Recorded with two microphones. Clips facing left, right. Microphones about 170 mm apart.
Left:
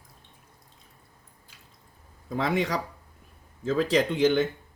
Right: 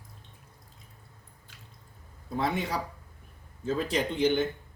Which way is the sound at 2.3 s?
90° left.